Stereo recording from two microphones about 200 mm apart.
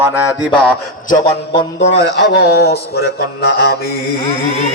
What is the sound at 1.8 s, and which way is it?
Mantra, 60° left (ahead or behind).